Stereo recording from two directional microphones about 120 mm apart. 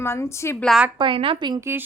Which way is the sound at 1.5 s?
20° right (ahead or behind).